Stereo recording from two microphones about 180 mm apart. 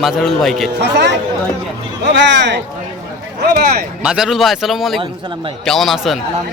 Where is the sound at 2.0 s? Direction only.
75° right (ahead or behind).